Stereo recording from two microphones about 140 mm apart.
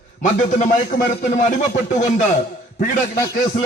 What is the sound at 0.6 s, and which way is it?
Speech, 60° left (ahead or behind).